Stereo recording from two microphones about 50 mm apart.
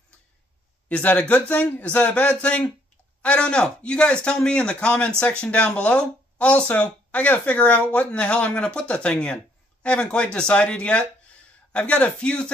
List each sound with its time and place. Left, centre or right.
0.8 s speech: left